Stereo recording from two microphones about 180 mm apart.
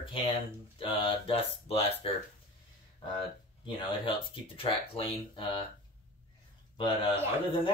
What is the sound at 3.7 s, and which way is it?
Speech, 30° left (ahead or behind).